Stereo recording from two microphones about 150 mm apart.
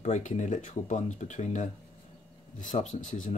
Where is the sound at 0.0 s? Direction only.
55° left (ahead or behind).